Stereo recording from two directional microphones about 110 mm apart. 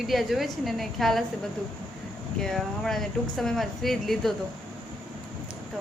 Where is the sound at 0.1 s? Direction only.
Centre (ahead or behind).